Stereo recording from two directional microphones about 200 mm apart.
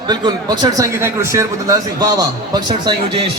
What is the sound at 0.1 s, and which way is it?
A man's voice, 20° right (ahead or behind).